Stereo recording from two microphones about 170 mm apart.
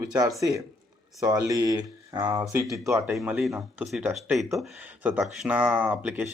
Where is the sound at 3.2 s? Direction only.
Centre (ahead or behind).